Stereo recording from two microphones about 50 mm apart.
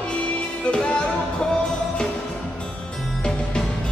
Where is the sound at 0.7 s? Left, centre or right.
Centre.